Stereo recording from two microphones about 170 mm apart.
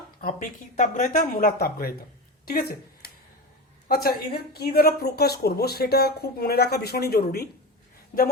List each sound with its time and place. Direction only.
0.8 s speech: 50° left (ahead or behind)
8.1 s speech: 50° left (ahead or behind)